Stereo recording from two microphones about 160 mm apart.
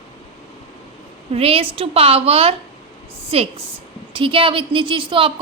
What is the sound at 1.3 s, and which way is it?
A woman's voice, 35° right (ahead or behind).